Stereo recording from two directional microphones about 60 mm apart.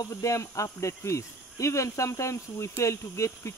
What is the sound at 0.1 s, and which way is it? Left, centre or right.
Speech, left.